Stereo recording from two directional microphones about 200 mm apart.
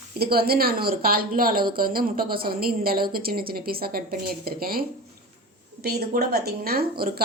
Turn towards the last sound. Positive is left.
turn(degrees=-50)  # may be behind; listen again after turning